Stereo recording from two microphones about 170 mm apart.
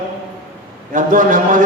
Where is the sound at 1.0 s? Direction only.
50° right (ahead or behind).